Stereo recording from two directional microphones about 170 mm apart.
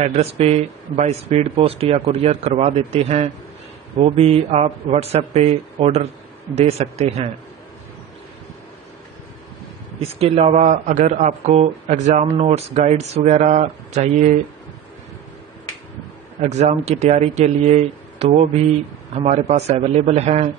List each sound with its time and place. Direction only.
0.0 s speech: 35° right (ahead or behind)
9.9 s speech: 35° right (ahead or behind)
16.3 s speech: 45° right (ahead or behind)